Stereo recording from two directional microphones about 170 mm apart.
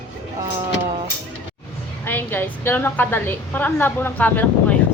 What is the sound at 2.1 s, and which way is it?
A woman's voice, 10° left (ahead or behind).